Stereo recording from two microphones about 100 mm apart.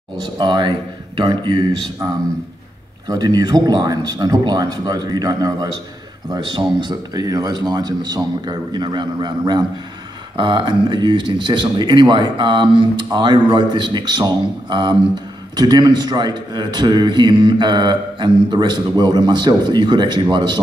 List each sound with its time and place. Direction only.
0.2 s a man's voice: 50° right (ahead or behind)
3.1 s a man's voice: 40° right (ahead or behind)